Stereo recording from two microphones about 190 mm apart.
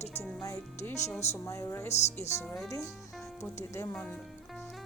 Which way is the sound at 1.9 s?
35° left (ahead or behind).